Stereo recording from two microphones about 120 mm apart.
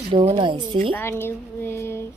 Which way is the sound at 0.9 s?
20° left (ahead or behind).